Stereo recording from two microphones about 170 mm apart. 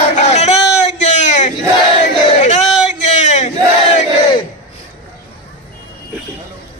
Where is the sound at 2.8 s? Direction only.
45° left (ahead or behind).